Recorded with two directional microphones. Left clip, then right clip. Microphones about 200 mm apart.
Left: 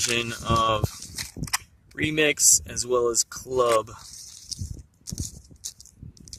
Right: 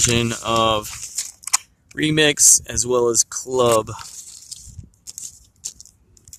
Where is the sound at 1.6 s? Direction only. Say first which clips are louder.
Right 5 dB; 15° right (ahead or behind).